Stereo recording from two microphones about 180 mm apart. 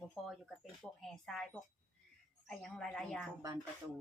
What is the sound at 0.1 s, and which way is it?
Speech, centre (ahead or behind).